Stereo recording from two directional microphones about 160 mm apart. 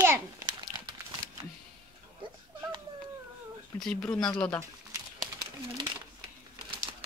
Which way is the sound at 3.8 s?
5° left (ahead or behind).